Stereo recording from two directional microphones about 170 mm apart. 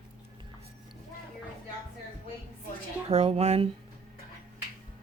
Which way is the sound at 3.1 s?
35° right (ahead or behind).